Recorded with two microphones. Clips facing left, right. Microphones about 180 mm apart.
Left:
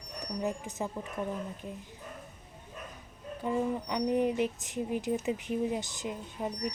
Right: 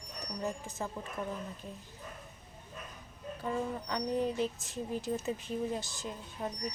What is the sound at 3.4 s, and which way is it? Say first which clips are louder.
Speech: left 5 dB; 15° left (ahead or behind).